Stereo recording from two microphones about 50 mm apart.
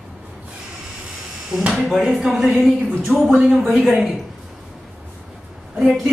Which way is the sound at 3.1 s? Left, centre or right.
Right.